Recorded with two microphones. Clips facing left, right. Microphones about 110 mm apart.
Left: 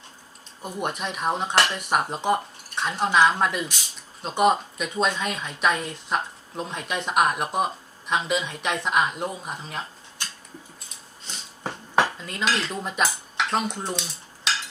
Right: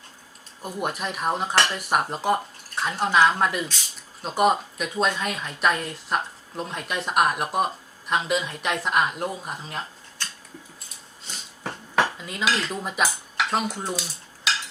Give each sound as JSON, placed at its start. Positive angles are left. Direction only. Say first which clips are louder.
{"t": 0.6, "sound": "speech", "louder": "even", "side_deg": 0}
{"t": 10.2, "sound": "a sound", "louder": "right 1 dB", "side_deg": 15}
{"t": 12.0, "sound": "cutlery", "louder": "even", "side_deg": -5}